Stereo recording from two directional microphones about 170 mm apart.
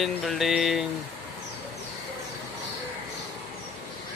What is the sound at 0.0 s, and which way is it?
Speech, centre (ahead or behind).